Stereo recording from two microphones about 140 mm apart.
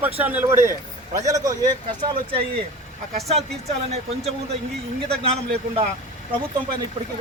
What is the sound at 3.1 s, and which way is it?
Speech, 50° right (ahead or behind).